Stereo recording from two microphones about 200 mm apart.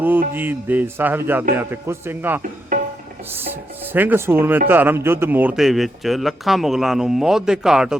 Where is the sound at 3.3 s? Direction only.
10° right (ahead or behind).